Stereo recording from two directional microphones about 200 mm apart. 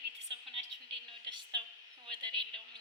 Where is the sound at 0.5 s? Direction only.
25° right (ahead or behind).